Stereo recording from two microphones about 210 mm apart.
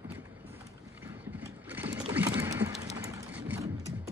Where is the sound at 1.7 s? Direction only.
10° right (ahead or behind).